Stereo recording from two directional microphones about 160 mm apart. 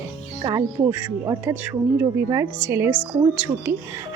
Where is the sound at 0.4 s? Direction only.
20° right (ahead or behind).